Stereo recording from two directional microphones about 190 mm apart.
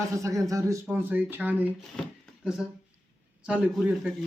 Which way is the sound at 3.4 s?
5° right (ahead or behind).